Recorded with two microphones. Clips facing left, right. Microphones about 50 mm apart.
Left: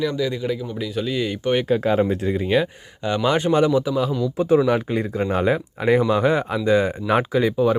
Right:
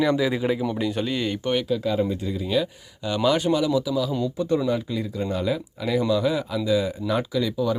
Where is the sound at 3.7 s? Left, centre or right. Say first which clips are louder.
Left 3 dB; left.